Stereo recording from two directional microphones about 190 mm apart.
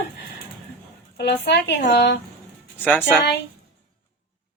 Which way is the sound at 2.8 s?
10° left (ahead or behind).